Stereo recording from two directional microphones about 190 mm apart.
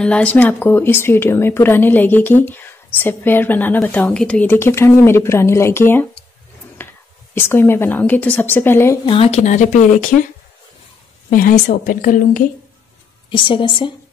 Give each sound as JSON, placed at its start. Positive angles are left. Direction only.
{"t": 0.0, "sound": "speech", "side_deg": 5}
{"t": 9.0, "sound": "speech", "side_deg": 30}
{"t": 11.2, "sound": "a woman's voice", "side_deg": 45}
{"t": 13.3, "sound": "a woman's voice", "side_deg": 25}